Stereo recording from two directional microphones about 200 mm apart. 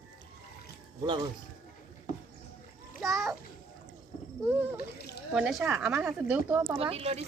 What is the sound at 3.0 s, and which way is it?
Speech, centre (ahead or behind).